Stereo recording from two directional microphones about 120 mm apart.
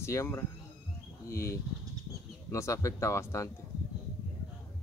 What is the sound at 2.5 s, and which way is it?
Speech, 25° left (ahead or behind).